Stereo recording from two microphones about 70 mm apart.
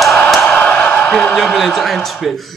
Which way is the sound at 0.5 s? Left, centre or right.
Left.